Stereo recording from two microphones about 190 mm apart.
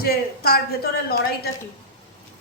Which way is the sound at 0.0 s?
55° left (ahead or behind).